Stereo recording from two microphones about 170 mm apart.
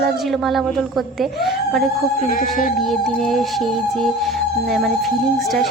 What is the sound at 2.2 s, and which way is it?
Speech, 50° left (ahead or behind).